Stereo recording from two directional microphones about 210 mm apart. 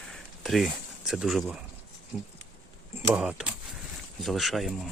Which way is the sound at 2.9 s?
5° right (ahead or behind).